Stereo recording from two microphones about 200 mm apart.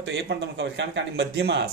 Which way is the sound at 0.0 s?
60° right (ahead or behind).